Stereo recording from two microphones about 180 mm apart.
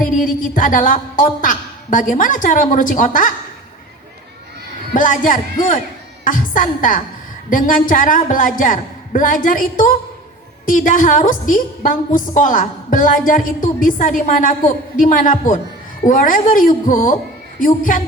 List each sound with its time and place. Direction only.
0.0 s a woman's voice: 50° left (ahead or behind)
4.9 s a woman's voice: 50° left (ahead or behind)